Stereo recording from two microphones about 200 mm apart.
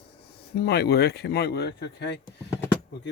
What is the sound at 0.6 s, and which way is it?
Speech, 55° left (ahead or behind).